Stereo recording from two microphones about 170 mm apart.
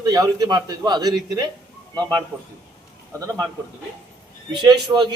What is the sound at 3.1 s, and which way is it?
Speech, 15° right (ahead or behind).